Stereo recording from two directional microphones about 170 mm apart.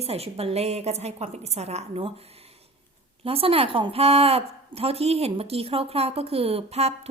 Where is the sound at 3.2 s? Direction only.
35° right (ahead or behind).